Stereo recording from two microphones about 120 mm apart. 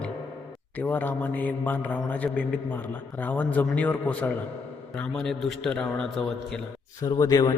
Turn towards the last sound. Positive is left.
turn(degrees=30)  # may be behind; listen again after turning